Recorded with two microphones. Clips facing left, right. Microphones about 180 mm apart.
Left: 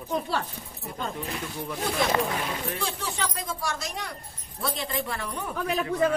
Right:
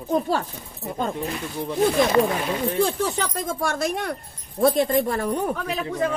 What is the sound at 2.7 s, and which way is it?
Speech, 50° right (ahead or behind).